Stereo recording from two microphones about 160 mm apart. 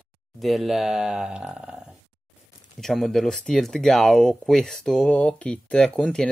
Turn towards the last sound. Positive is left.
turn(degrees=5)  # may be behind; listen again after turning